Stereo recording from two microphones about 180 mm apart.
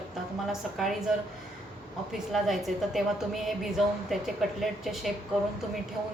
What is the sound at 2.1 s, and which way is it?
A woman's voice, centre (ahead or behind).